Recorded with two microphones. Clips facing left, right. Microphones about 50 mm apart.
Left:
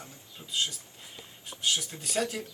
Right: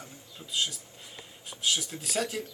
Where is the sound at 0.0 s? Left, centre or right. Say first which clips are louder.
Right 1 dB; centre.